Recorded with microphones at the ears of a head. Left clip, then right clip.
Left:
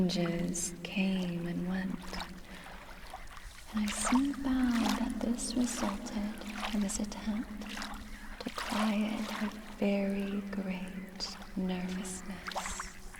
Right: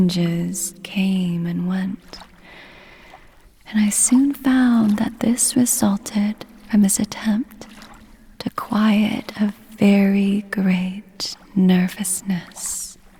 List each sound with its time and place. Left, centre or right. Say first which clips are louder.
0.0 s speech: right 10 dB; right
3.7 s speech: right 12 dB; right